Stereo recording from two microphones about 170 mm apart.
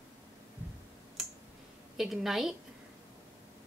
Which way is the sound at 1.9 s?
Centre (ahead or behind).